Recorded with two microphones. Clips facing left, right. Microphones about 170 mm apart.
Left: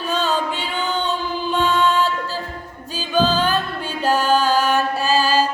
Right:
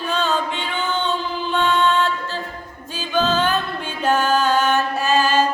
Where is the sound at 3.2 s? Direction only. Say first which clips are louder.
Left 1 dB; 35° left (ahead or behind).